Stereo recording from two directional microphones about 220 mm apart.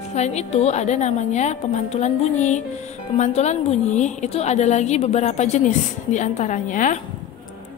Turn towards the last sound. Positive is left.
turn(degrees=35)  # may be behind; listen again after turning